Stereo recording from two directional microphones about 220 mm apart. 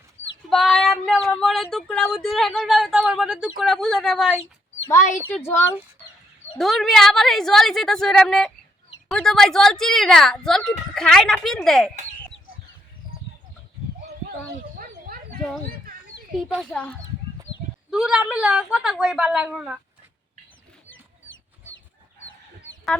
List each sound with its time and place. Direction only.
0.5 s speech: centre (ahead or behind)
5.3 s speech: 10° left (ahead or behind)
14.8 s a sound: 40° right (ahead or behind)
16.5 s speech: 5° left (ahead or behind)